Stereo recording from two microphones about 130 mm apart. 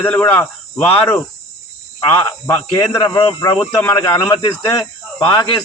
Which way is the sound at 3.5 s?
5° left (ahead or behind).